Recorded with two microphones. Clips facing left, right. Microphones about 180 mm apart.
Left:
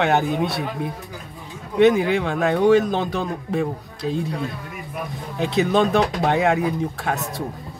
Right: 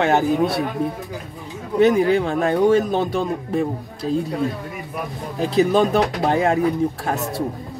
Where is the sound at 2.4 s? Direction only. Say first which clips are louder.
Left 3 dB; centre (ahead or behind).